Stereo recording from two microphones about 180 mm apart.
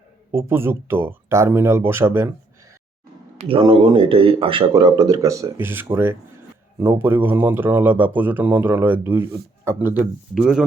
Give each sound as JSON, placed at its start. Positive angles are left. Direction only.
{"t": 0.3, "sound": "speech", "side_deg": -15}
{"t": 3.3, "sound": "speech", "side_deg": -30}